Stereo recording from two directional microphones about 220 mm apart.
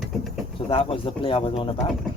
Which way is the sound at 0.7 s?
25° left (ahead or behind).